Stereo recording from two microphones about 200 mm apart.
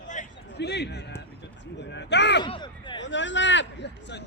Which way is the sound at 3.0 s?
65° left (ahead or behind).